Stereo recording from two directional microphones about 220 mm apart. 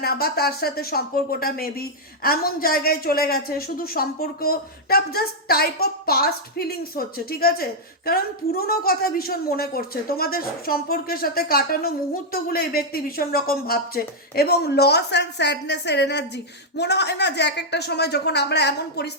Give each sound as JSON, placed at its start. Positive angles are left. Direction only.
{"t": 0.0, "sound": "speech", "side_deg": 45}